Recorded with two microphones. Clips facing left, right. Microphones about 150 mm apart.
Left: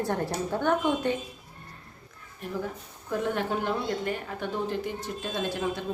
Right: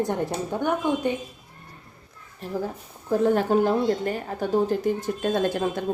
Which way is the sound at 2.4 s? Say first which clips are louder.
Right 4 dB; 30° right (ahead or behind).